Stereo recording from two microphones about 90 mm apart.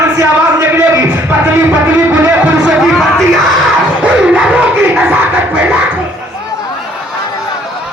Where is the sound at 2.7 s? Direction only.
5° right (ahead or behind).